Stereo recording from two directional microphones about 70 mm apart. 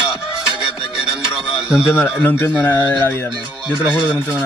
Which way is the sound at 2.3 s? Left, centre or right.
Left.